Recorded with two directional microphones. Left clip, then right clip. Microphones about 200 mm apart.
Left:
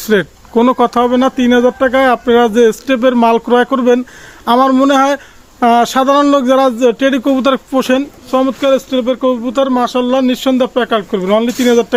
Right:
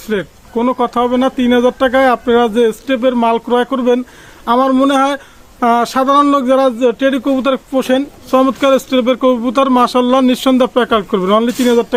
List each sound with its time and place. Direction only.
0.1 s speech: 40° left (ahead or behind); by 8.0 s 20° left (ahead or behind)
8.3 s speech: 15° right (ahead or behind); by 11.9 s 10° left (ahead or behind)